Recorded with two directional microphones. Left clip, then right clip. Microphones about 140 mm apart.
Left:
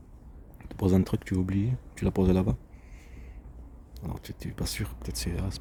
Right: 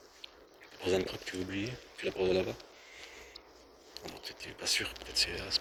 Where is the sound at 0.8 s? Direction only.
40° left (ahead or behind).